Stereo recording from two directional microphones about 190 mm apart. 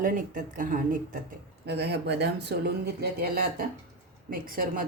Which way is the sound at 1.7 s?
60° right (ahead or behind).